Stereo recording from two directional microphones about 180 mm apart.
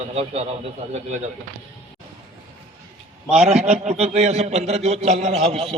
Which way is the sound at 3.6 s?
40° right (ahead or behind).